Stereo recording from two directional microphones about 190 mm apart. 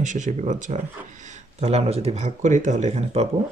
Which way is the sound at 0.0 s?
40° right (ahead or behind).